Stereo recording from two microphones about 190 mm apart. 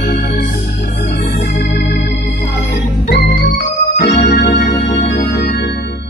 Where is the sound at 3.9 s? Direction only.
40° left (ahead or behind).